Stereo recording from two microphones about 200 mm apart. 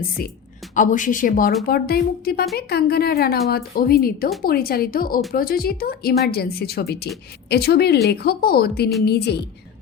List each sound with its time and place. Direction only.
0.8 s a woman's voice: 40° left (ahead or behind)